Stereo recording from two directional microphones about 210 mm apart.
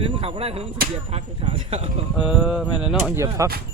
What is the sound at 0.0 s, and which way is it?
Speech, 25° right (ahead or behind).